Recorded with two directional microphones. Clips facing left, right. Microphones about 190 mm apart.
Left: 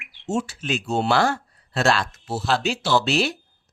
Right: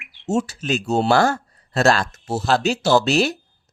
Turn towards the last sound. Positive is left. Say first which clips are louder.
# right 4 dB
turn(degrees=-40)  # may be behind; listen again after turning